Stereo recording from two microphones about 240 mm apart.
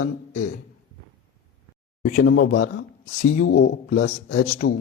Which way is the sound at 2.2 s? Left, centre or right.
Left.